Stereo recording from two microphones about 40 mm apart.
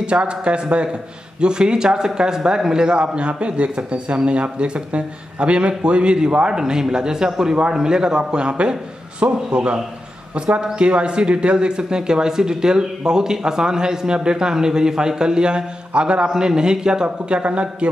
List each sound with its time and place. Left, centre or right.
0.0 s speech: right
17.4 s speech: right